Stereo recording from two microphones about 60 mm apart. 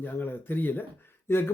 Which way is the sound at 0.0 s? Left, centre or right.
Left.